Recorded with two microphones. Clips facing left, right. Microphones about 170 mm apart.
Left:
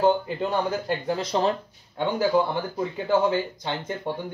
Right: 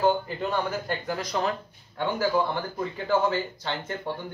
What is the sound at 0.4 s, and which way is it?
Speech, 25° left (ahead or behind).